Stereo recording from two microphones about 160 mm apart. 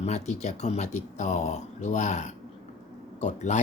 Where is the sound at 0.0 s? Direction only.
45° left (ahead or behind).